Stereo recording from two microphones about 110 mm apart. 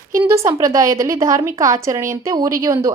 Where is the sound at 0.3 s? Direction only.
25° right (ahead or behind).